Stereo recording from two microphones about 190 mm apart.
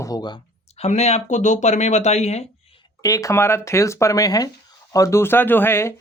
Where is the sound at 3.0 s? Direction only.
15° left (ahead or behind).